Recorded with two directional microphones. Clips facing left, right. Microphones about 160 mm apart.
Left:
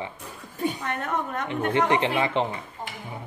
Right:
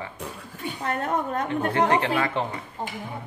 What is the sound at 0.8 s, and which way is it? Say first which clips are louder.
A woman's voice: right 2 dB; 35° right (ahead or behind).